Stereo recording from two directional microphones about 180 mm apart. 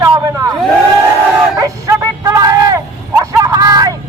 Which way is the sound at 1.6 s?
20° right (ahead or behind).